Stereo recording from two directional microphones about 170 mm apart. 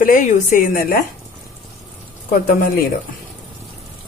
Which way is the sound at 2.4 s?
55° left (ahead or behind).